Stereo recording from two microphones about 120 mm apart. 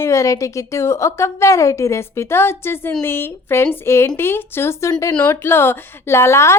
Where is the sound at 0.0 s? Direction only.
25° left (ahead or behind).